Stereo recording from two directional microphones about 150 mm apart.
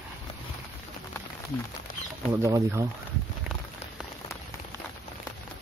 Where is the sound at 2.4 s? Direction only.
20° right (ahead or behind).